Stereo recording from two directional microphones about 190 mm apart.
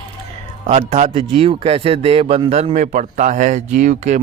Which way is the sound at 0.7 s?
35° right (ahead or behind).